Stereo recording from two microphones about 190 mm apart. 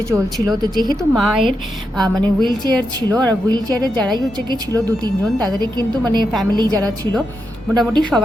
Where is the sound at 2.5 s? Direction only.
20° right (ahead or behind).